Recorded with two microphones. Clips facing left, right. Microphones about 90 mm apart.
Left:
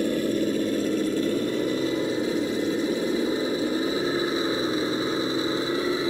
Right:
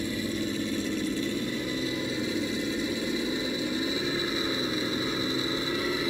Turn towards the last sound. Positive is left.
turn(degrees=30)  # may be behind; listen again after turning